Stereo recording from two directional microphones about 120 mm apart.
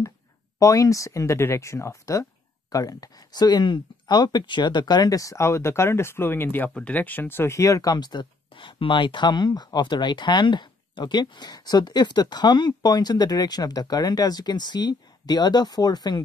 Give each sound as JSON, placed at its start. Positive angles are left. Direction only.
{"t": 0.6, "sound": "speech", "side_deg": 30}